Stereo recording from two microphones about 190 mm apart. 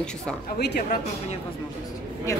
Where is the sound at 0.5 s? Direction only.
55° left (ahead or behind).